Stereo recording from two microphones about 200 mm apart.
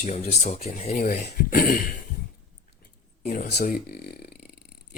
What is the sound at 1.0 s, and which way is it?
Speech, 50° left (ahead or behind).